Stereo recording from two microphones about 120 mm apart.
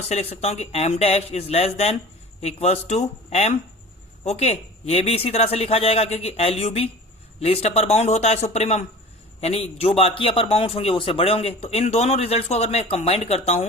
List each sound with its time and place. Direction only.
0.1 s a man's voice: 60° left (ahead or behind)